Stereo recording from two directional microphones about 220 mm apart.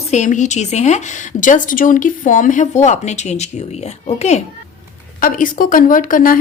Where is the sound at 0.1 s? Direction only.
35° left (ahead or behind).